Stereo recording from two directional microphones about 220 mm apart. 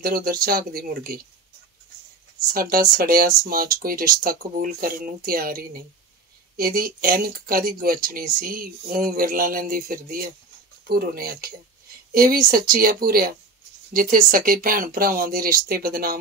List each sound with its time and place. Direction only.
0.0 s speech: 40° right (ahead or behind)
2.5 s speech: 40° right (ahead or behind)